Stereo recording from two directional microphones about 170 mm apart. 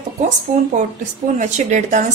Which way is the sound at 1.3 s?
45° right (ahead or behind).